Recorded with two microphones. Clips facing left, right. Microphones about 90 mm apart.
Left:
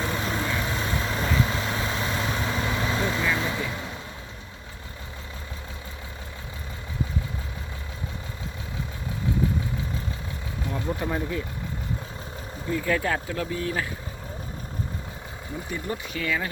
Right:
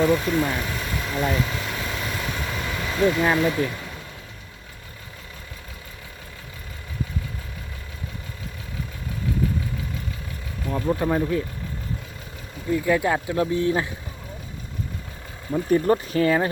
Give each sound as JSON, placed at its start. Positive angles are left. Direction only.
{"t": 0.0, "sound": "speech", "side_deg": 30}
{"t": 1.3, "sound": "vehicle", "side_deg": 30}
{"t": 3.3, "sound": "speech", "side_deg": 25}
{"t": 11.0, "sound": "speech", "side_deg": -20}
{"t": 12.7, "sound": "speech", "side_deg": -15}
{"t": 15.5, "sound": "speech", "side_deg": -45}